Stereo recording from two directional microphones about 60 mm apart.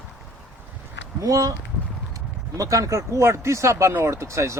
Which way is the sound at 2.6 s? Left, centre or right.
Right.